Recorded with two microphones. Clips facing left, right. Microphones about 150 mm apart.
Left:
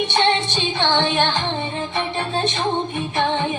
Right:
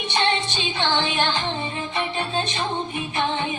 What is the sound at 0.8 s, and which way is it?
Music, 50° left (ahead or behind).